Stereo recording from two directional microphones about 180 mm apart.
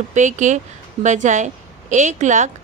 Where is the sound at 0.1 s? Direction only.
40° right (ahead or behind).